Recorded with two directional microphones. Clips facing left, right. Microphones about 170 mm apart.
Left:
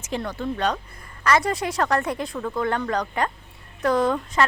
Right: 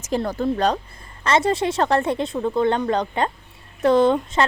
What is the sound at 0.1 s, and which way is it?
Speech, 40° right (ahead or behind).